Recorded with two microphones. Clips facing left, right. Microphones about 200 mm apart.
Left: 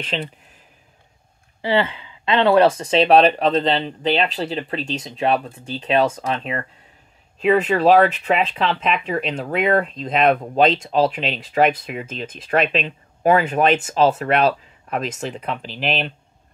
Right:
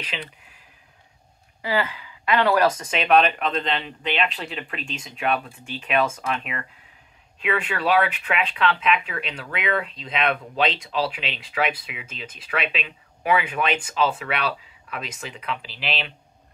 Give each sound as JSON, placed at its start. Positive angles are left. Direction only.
{"t": 1.6, "sound": "speech", "side_deg": 30}